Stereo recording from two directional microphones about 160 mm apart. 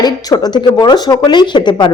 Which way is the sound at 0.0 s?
25° left (ahead or behind).